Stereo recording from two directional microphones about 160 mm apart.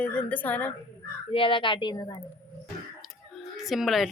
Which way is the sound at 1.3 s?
35° left (ahead or behind).